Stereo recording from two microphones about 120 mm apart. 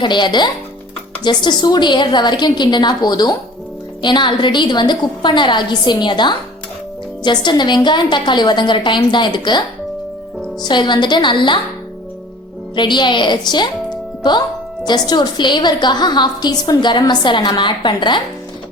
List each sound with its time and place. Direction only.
0.0 s a woman's voice: 40° left (ahead or behind)
12.7 s a woman's voice: 40° left (ahead or behind)